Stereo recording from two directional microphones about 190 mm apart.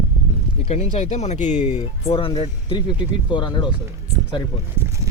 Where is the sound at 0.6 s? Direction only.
35° left (ahead or behind).